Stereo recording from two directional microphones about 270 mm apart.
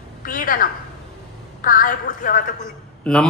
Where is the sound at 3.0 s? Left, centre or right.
Centre.